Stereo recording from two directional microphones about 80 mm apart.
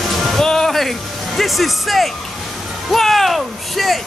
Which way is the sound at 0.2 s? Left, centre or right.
Centre.